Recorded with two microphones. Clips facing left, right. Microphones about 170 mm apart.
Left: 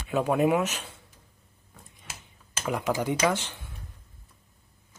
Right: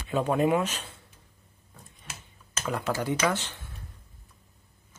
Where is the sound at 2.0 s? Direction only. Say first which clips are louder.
Even; 15° left (ahead or behind).